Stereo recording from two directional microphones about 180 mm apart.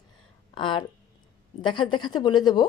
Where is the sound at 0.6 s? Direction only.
25° left (ahead or behind).